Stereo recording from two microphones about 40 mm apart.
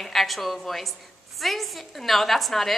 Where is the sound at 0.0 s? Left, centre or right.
Centre.